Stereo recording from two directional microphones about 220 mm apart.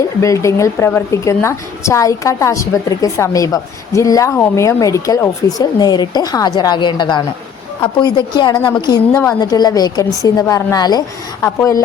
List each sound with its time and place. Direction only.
0.2 s a woman's voice: 15° left (ahead or behind)